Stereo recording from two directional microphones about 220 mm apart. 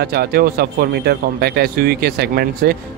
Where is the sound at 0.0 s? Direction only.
45° right (ahead or behind).